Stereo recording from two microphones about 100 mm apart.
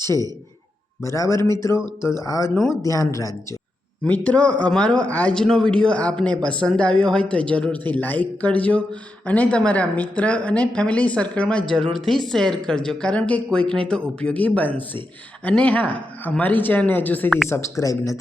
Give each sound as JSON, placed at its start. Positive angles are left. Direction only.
{"t": 1.0, "sound": "speech", "side_deg": 30}
{"t": 4.0, "sound": "speech", "side_deg": 15}
{"t": 17.5, "sound": "speech", "side_deg": 30}